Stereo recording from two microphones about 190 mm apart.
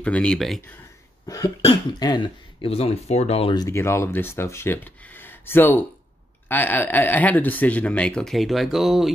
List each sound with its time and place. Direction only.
0.0 s speech: 5° left (ahead or behind)
1.2 s cough: 20° left (ahead or behind)
1.6 s speech: 25° left (ahead or behind)
3.6 s speech: 15° left (ahead or behind); by 9.1 s centre (ahead or behind)